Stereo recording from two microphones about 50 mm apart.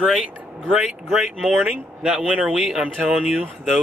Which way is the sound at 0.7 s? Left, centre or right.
Centre.